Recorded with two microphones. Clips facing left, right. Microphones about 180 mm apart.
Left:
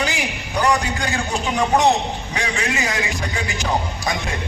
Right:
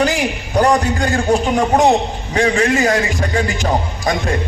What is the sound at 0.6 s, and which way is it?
A man's voice, 45° right (ahead or behind).